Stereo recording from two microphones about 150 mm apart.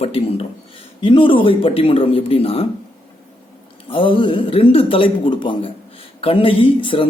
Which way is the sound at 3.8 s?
35° left (ahead or behind).